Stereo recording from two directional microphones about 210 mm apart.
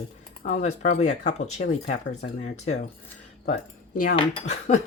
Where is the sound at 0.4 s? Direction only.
35° left (ahead or behind).